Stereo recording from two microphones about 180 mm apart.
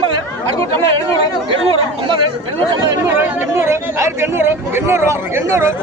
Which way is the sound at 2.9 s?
15° right (ahead or behind).